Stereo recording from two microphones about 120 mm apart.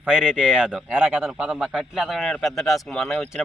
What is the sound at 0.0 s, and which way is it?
Speech, 10° right (ahead or behind).